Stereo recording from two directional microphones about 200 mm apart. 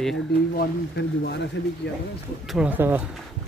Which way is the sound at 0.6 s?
55° left (ahead or behind).